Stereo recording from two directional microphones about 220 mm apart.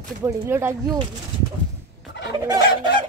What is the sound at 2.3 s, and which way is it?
Fowl, 15° right (ahead or behind).